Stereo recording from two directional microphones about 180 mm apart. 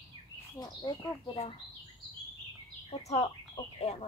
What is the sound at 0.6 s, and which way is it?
Speech, 25° left (ahead or behind).